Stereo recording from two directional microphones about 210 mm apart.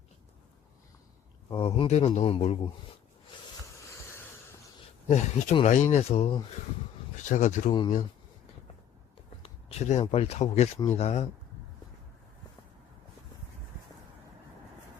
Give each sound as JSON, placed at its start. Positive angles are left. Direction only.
{"t": 1.5, "sound": "speech", "side_deg": 25}
{"t": 5.0, "sound": "speech", "side_deg": 35}
{"t": 9.4, "sound": "speech", "side_deg": 30}